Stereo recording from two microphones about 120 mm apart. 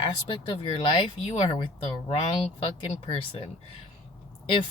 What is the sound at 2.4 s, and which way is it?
Speech, 50° left (ahead or behind).